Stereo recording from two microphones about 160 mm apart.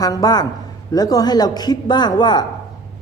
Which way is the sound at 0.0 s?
25° left (ahead or behind).